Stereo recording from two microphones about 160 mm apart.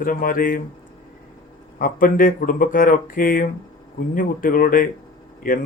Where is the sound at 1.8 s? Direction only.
60° left (ahead or behind).